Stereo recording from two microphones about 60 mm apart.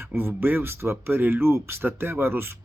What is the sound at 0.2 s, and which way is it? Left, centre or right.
Speech, right.